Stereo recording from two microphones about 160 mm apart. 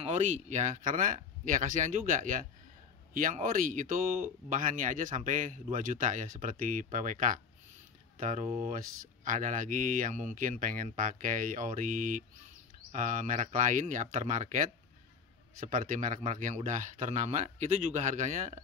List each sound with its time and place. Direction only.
0.0 s speech: 45° right (ahead or behind)